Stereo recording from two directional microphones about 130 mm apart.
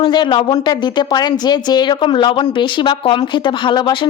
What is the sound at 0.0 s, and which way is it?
Speech, 35° left (ahead or behind).